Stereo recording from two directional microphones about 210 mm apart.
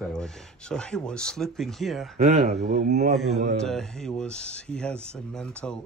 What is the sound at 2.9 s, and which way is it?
Speech, 50° right (ahead or behind).